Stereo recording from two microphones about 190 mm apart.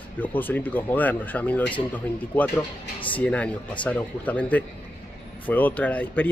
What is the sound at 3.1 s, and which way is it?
Speech, 5° left (ahead or behind).